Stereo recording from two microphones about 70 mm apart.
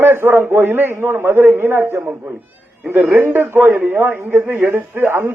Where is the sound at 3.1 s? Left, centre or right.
Right.